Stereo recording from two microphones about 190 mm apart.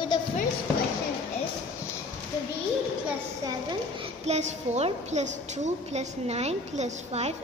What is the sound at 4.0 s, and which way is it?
A woman's voice, 35° right (ahead or behind).